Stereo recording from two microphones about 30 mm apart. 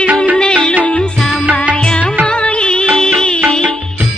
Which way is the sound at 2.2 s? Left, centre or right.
Left.